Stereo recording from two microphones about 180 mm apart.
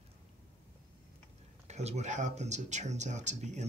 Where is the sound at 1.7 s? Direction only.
40° right (ahead or behind).